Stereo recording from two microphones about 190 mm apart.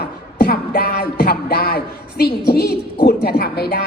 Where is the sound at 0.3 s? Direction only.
55° left (ahead or behind).